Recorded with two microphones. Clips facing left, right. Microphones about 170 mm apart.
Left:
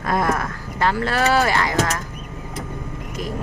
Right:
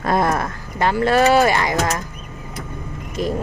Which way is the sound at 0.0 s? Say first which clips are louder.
Right 2 dB; 30° right (ahead or behind).